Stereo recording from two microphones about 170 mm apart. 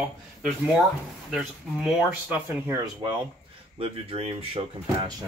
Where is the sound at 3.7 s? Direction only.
35° right (ahead or behind).